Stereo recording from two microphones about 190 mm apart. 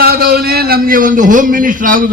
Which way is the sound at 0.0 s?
50° right (ahead or behind).